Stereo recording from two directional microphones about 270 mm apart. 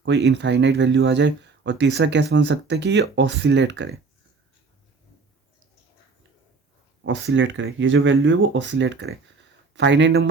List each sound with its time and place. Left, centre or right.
0.0 s speech: right
7.0 s speech: right